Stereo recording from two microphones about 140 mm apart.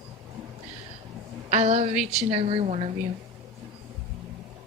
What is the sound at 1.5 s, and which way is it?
A woman's voice, 55° right (ahead or behind).